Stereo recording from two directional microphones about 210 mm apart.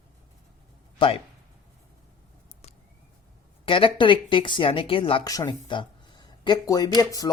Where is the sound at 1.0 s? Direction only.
25° left (ahead or behind).